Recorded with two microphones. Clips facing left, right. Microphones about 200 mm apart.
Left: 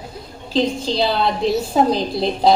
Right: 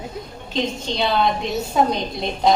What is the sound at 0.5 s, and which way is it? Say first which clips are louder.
A woman's voice: left 5 dB; 35° left (ahead or behind).